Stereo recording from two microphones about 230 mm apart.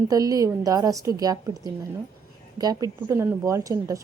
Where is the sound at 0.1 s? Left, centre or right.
Centre.